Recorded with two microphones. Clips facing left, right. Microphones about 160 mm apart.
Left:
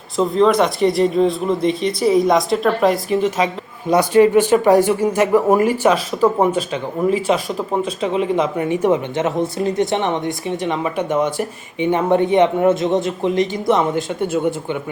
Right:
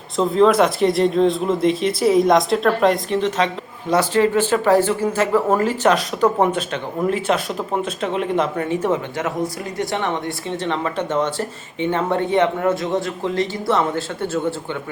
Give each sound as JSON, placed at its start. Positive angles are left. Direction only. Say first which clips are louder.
{"t": 0.2, "sound": "speech", "louder": "even", "side_deg": 0}
{"t": 8.5, "sound": "speech", "louder": "left 3 dB", "side_deg": 15}